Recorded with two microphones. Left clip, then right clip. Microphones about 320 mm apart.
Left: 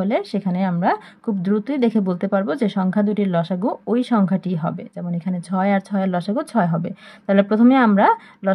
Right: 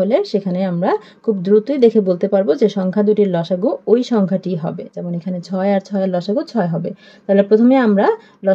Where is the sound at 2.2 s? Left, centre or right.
Left.